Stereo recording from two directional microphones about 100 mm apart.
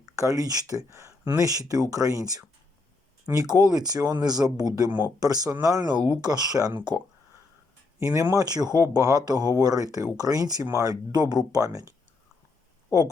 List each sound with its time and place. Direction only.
0.0 s speech: 35° right (ahead or behind)
3.5 s speech: 40° right (ahead or behind)
4.9 s speech: 20° right (ahead or behind)
5.2 s speech: 40° right (ahead or behind)
7.9 s speech: 30° right (ahead or behind)
8.4 s speech: 40° right (ahead or behind)
11.1 s speech: 45° right (ahead or behind)